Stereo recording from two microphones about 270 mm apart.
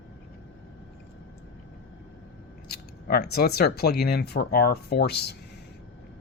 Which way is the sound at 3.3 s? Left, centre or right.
Left.